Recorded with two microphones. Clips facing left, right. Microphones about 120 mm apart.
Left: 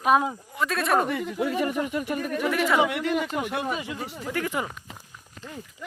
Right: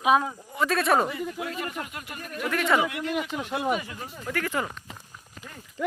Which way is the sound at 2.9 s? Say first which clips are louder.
Left 4 dB; 75° left (ahead or behind).